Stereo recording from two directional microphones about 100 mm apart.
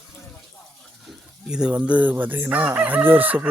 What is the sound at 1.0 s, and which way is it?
Chicken, 10° right (ahead or behind).